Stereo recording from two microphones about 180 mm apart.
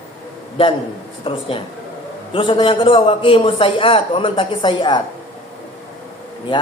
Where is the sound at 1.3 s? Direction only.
30° left (ahead or behind).